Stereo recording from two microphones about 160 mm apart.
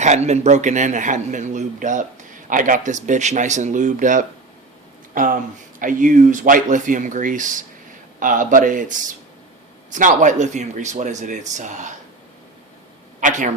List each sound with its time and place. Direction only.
0.0 s a man's voice: 45° right (ahead or behind)
13.1 s a man's voice: 50° right (ahead or behind)